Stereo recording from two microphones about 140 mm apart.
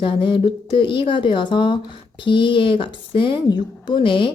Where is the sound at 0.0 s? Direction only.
40° left (ahead or behind).